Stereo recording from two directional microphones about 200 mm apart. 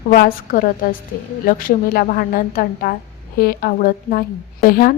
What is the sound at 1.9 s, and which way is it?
A woman's voice, 45° left (ahead or behind).